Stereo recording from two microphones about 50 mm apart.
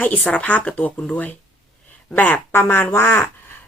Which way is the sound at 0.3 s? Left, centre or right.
Left.